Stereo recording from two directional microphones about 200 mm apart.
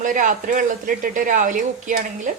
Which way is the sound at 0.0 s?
40° right (ahead or behind).